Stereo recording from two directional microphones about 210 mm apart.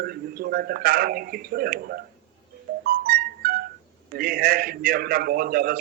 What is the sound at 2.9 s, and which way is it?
Music, 45° right (ahead or behind).